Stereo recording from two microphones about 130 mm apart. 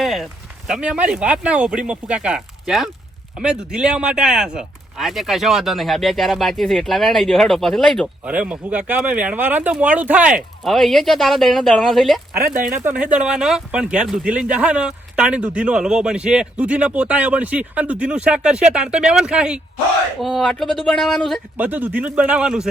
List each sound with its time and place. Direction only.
0.0 s a sound: centre (ahead or behind)
0.7 s speech: 10° right (ahead or behind)
8.2 s speech: 10° right (ahead or behind)
10.6 s speech: centre (ahead or behind)
12.7 s speech: 15° right (ahead or behind); by 21.4 s 5° left (ahead or behind)
21.6 s speech: 15° right (ahead or behind)